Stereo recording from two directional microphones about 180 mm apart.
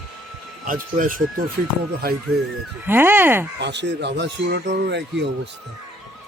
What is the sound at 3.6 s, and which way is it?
Speech, 70° right (ahead or behind).